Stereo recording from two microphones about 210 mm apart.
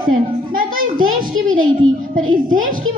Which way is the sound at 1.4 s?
75° right (ahead or behind).